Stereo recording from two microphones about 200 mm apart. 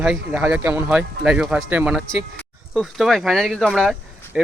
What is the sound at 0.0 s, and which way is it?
Speech, 5° right (ahead or behind).